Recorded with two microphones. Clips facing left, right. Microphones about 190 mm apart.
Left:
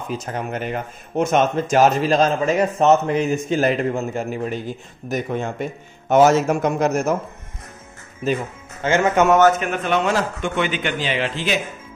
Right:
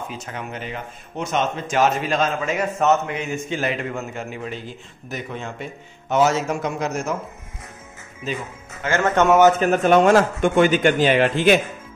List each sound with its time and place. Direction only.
0.2 s speech: 40° left (ahead or behind)
8.8 s speech: 15° left (ahead or behind)
9.6 s speech: 40° right (ahead or behind)